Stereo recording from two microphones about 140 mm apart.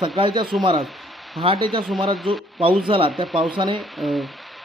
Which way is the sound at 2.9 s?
40° right (ahead or behind).